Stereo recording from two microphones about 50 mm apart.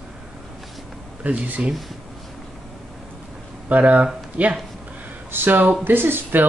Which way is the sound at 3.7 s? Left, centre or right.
Right.